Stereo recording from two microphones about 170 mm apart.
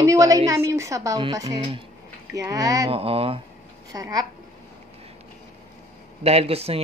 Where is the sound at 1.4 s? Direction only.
30° right (ahead or behind).